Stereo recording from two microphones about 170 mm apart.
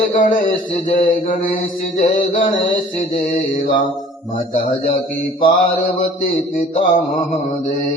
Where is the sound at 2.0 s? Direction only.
50° left (ahead or behind).